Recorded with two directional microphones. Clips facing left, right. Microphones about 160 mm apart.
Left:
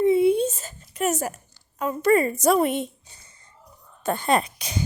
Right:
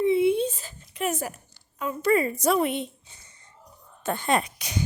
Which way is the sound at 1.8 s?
45° left (ahead or behind).